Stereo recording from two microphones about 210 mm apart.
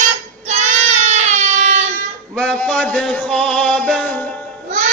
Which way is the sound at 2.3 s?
5° left (ahead or behind).